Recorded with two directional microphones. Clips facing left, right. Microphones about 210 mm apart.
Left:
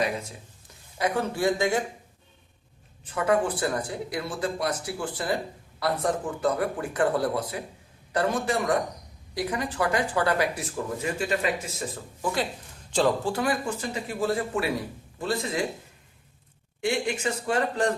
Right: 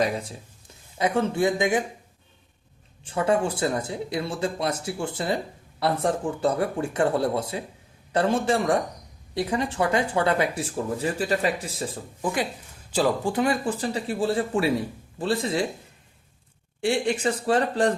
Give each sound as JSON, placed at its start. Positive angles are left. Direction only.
{"t": 0.0, "sound": "speech", "side_deg": -30}
{"t": 3.0, "sound": "speech", "side_deg": -30}
{"t": 12.2, "sound": "speech", "side_deg": -15}
{"t": 13.3, "sound": "speech", "side_deg": -25}
{"t": 16.8, "sound": "speech", "side_deg": -30}